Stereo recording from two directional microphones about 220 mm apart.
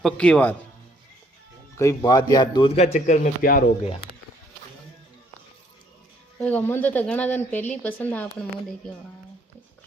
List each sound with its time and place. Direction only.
0.0 s speech: 5° left (ahead or behind)
1.7 s a man's voice: 15° left (ahead or behind); by 3.6 s 35° left (ahead or behind)
6.4 s speech: 5° left (ahead or behind)